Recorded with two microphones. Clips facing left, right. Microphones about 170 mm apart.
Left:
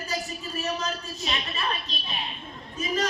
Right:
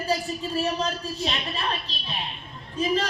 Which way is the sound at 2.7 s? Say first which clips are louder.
Right 3 dB; 30° right (ahead or behind).